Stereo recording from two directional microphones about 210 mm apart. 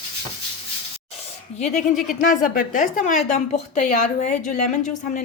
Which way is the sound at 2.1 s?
40° left (ahead or behind).